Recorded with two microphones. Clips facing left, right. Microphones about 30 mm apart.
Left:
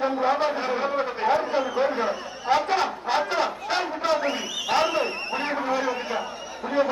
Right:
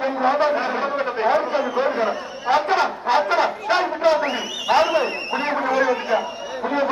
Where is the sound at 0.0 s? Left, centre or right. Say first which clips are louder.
Right 4 dB; centre.